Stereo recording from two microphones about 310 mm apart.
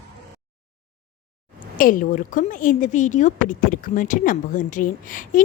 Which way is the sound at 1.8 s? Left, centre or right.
Left.